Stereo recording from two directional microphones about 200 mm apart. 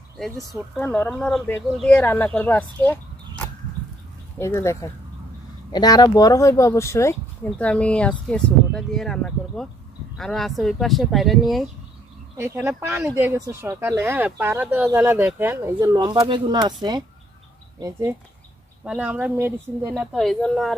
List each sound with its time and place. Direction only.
0.5 s speech: 10° left (ahead or behind)
12.4 s speech: 10° right (ahead or behind)
17.7 s speech: 15° right (ahead or behind)
19.9 s speech: centre (ahead or behind)